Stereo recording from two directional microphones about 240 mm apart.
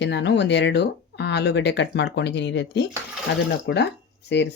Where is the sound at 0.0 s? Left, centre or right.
Left.